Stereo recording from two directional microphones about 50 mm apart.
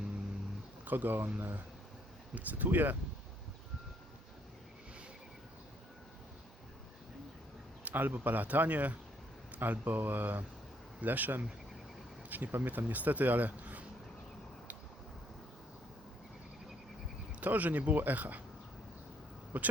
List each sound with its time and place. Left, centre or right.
0.9 s speech: right
7.9 s speech: right
17.4 s speech: right
19.5 s speech: right